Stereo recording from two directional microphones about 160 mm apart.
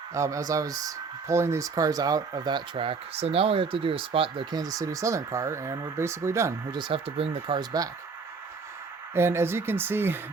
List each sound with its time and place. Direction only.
0.1 s speech: 20° right (ahead or behind)
9.1 s speech: 15° right (ahead or behind)